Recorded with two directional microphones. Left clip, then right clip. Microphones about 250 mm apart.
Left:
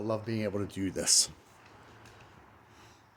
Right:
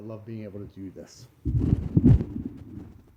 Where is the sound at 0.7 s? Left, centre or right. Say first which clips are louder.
Left 14 dB; left.